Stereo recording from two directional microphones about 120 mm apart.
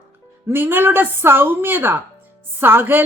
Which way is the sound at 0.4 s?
20° right (ahead or behind).